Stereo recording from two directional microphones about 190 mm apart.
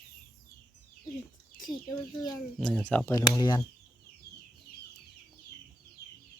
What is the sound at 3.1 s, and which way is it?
Speech, 20° left (ahead or behind).